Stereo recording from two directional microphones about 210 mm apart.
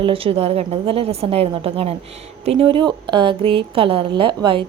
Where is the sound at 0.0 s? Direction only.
25° right (ahead or behind).